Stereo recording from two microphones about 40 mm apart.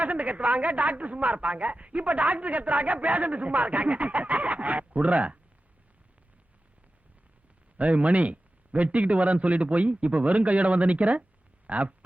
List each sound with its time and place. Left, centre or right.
0.0 s speech: right
7.8 s speech: right